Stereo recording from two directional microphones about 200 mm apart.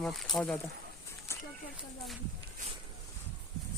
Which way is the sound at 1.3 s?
15° left (ahead or behind).